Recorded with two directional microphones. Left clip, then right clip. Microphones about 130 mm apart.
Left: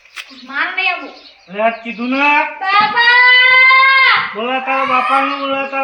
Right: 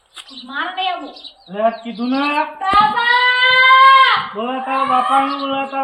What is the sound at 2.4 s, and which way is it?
Child singing, 25° left (ahead or behind).